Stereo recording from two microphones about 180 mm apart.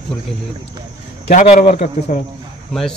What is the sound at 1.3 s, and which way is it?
Speech, 40° left (ahead or behind).